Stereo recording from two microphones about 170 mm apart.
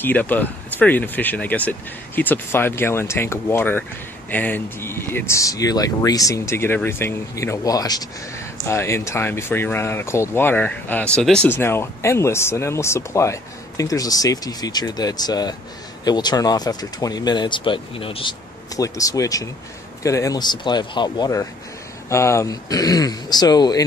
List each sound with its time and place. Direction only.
0.0 s speech: 10° left (ahead or behind); by 18.3 s 30° left (ahead or behind)
18.8 s speech: 20° left (ahead or behind)